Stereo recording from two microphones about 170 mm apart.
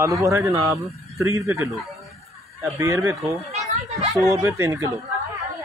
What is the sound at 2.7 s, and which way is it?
Speech, 15° right (ahead or behind).